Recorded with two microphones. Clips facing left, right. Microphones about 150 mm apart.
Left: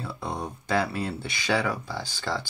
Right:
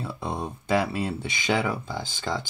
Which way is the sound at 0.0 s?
20° right (ahead or behind).